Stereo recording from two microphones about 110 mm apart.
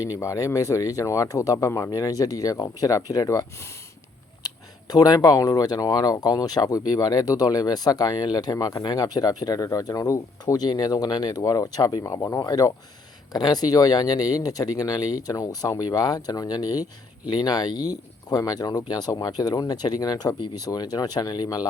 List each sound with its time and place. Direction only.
0.0 s speech: 30° left (ahead or behind)